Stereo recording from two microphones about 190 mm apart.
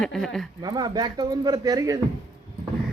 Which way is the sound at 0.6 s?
20° right (ahead or behind).